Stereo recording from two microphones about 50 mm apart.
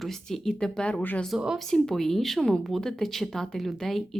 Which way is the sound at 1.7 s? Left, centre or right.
Centre.